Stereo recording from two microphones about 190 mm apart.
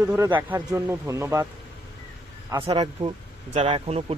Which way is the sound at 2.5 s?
20° right (ahead or behind).